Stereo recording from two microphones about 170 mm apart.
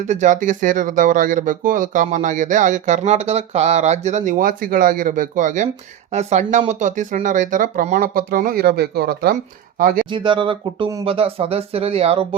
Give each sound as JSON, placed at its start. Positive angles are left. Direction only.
{"t": 0.1, "sound": "speech", "side_deg": -45}
{"t": 10.1, "sound": "speech", "side_deg": -30}